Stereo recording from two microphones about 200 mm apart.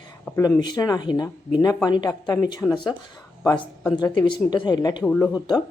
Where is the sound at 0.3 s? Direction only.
10° left (ahead or behind).